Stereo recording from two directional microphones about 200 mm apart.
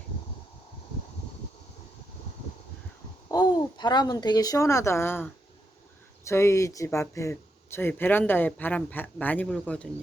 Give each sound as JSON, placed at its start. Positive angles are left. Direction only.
{"t": 3.3, "sound": "speech", "side_deg": 20}